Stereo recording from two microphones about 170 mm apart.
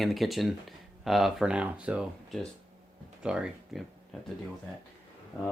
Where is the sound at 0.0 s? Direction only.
Centre (ahead or behind).